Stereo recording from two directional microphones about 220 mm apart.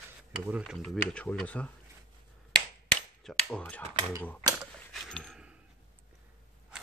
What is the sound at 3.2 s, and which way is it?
Speech, 5° left (ahead or behind).